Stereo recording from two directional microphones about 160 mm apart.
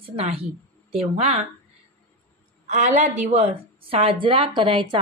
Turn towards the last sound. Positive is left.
turn(degrees=-30)  # may be behind; listen again after turning